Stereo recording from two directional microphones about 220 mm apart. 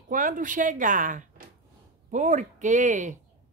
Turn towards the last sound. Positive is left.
turn(degrees=-35)  # may be behind; listen again after turning